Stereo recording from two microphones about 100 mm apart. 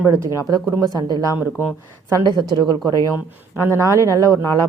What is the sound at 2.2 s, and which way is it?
Speech, 45° right (ahead or behind).